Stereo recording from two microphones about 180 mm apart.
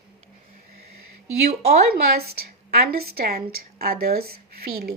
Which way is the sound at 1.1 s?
60° right (ahead or behind).